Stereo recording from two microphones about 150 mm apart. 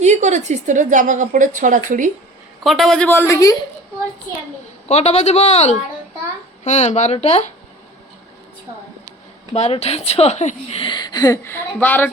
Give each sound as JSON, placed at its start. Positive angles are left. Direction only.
{"t": 0.0, "sound": "a woman's voice", "side_deg": -50}
{"t": 2.6, "sound": "a man's voice", "side_deg": 0}
{"t": 3.1, "sound": "a woman's voice", "side_deg": 15}
{"t": 4.9, "sound": "a man's voice", "side_deg": 45}
{"t": 9.5, "sound": "a woman's voice", "side_deg": 40}